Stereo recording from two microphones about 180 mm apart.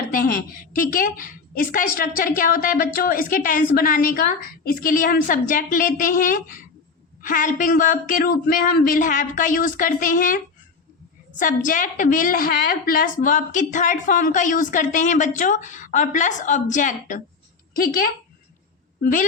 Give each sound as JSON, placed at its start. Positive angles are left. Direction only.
{"t": 0.1, "sound": "a woman's voice", "side_deg": 50}